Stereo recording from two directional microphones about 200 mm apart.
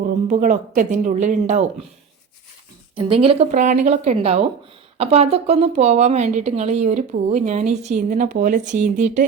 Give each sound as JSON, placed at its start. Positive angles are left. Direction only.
{"t": 0.3, "sound": "a woman's voice", "side_deg": -40}
{"t": 2.9, "sound": "a woman's voice", "side_deg": -25}